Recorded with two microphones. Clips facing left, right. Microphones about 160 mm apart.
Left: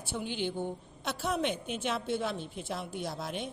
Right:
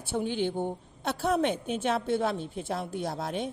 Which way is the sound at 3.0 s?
60° right (ahead or behind).